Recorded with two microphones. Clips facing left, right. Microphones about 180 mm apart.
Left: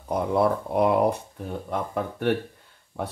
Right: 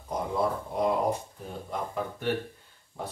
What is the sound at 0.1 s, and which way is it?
Speech, 65° left (ahead or behind).